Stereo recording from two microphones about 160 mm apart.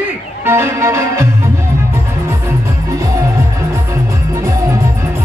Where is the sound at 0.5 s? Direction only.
15° right (ahead or behind).